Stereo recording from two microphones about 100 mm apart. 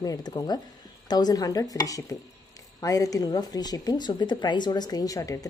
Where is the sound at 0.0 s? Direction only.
40° left (ahead or behind).